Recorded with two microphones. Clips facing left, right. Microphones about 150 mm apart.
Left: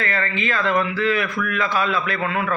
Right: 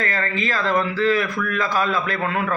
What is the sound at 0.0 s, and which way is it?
A man's voice, 40° right (ahead or behind).